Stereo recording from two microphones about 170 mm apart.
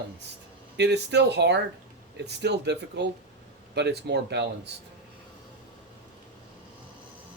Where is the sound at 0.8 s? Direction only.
80° right.